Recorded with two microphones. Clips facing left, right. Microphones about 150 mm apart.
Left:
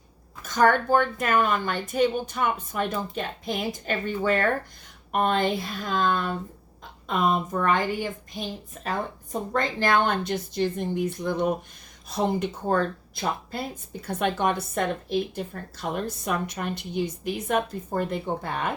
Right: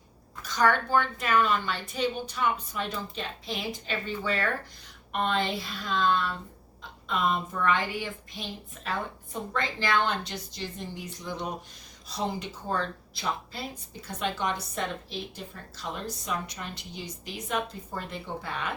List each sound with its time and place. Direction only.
0.4 s a woman's voice: 50° left (ahead or behind)